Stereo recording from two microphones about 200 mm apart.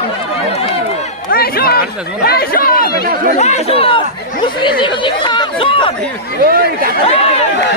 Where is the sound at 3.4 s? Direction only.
30° left (ahead or behind).